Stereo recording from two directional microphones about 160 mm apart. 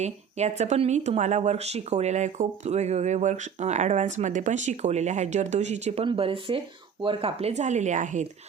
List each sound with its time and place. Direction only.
0.0 s speech: 45° right (ahead or behind)